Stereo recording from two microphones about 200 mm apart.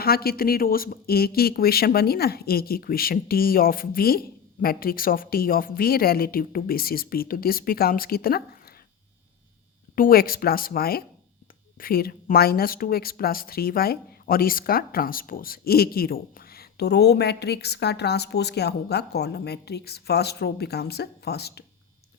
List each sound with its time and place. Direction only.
0.0 s a woman's voice: 50° left (ahead or behind)
9.9 s a woman's voice: 45° left (ahead or behind)